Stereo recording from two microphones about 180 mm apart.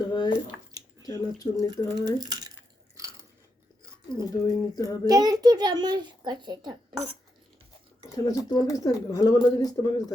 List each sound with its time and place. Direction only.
0.0 s a sound: 25° left (ahead or behind)
1.0 s speech: 20° left (ahead or behind)
2.0 s speech: 20° right (ahead or behind)
4.1 s speech: 20° left (ahead or behind)
5.0 s a child's voice: 20° right (ahead or behind)
8.1 s speech: 20° left (ahead or behind)